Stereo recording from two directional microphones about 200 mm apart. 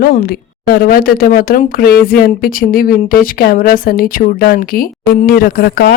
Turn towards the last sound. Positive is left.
turn(degrees=50)  # may be behind; listen again after turning